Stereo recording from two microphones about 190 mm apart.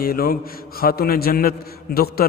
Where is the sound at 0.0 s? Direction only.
50° left (ahead or behind).